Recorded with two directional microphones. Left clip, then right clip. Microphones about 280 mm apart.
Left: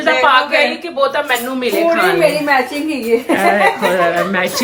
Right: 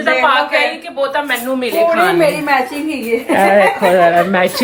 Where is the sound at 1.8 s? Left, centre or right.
Centre.